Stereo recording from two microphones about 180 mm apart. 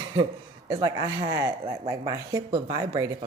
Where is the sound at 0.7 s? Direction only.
20° right (ahead or behind).